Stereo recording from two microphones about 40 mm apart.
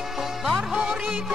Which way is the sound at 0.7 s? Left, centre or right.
Centre.